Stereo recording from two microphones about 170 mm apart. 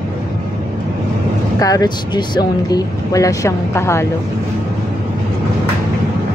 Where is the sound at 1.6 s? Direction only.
20° left (ahead or behind).